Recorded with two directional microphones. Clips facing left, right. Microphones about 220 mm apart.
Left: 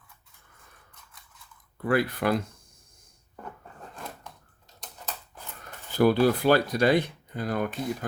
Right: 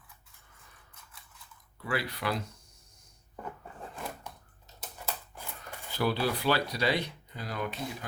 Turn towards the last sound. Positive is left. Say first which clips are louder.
# left 7 dB
turn(degrees=50)  # may be behind; listen again after turning